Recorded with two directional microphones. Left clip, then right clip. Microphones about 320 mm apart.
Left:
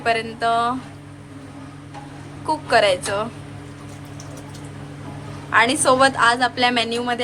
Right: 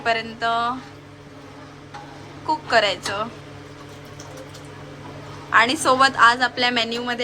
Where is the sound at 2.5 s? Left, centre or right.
Centre.